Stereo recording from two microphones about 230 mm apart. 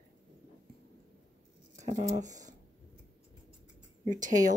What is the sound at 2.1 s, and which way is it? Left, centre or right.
Speech, right.